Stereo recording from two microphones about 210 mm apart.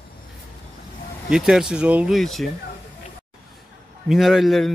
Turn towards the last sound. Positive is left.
turn(degrees=0)  # may be behind; listen again after turning